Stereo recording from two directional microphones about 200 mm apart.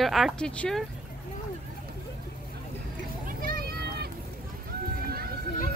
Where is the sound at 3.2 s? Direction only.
45° right (ahead or behind).